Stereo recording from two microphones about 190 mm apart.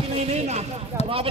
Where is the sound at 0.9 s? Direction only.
15° right (ahead or behind).